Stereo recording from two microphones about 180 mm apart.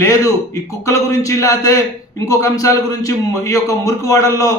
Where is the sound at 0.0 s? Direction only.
15° left (ahead or behind).